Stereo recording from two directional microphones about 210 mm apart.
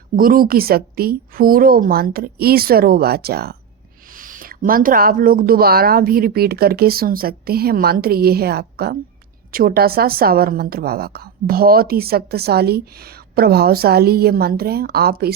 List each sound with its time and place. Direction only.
0.2 s a woman's voice: 45° right (ahead or behind)